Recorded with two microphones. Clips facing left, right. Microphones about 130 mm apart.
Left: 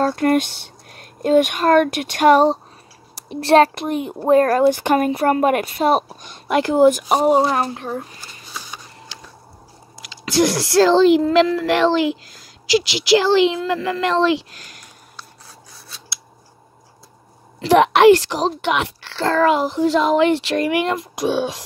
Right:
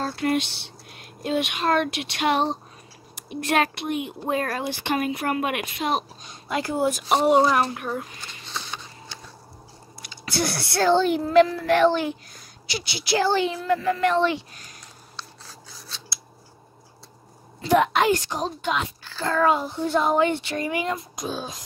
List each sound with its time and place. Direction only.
0.0 s speech: 50° left (ahead or behind)
6.3 s speech: 70° left (ahead or behind)
7.1 s speech: 40° left (ahead or behind)
8.5 s a sound: 10° left (ahead or behind)
9.9 s speech: 90° left
17.6 s a woman's voice: 85° left